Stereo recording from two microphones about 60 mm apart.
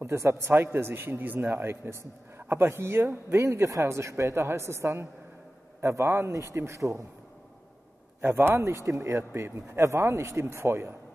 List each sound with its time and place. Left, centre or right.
0.0 s a man's voice: right
3.4 s a man's voice: right
8.2 s a man's voice: right
8.6 s speech: right